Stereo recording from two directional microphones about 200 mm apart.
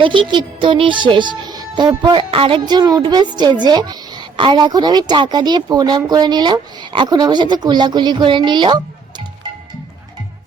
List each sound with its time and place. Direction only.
0.0 s speech: 25° right (ahead or behind)